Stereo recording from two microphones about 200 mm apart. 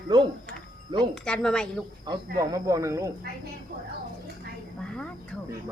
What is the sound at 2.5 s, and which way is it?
Speech, 15° right (ahead or behind).